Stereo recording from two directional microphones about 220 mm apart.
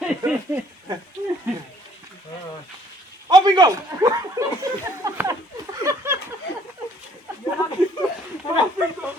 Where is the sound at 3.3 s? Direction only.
20° right (ahead or behind).